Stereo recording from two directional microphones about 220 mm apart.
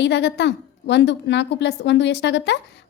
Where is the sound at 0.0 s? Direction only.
50° left (ahead or behind).